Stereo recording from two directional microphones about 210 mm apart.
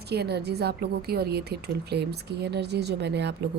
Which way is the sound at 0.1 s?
50° right (ahead or behind).